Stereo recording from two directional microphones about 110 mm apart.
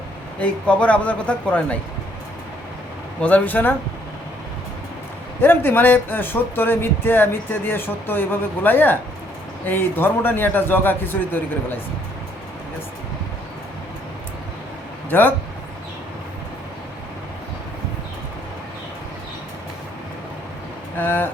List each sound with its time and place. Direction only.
0.3 s a man's voice: 10° left (ahead or behind)
3.2 s a man's voice: 15° left (ahead or behind)
5.4 s speech: 20° left (ahead or behind)
15.1 s a man's voice: 20° left (ahead or behind)
20.9 s a man's voice: 20° left (ahead or behind)